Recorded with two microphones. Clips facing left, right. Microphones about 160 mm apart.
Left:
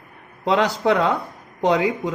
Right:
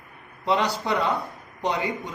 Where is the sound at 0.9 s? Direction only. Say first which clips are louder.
Left 6 dB; 90° left.